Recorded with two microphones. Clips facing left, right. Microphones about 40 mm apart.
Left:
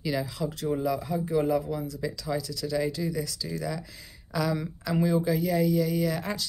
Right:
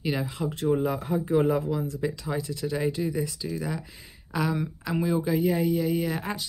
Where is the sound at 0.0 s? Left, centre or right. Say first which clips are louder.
Right 1 dB; right.